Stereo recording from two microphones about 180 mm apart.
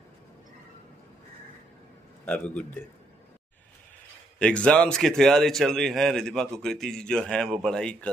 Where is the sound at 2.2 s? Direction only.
5° left (ahead or behind).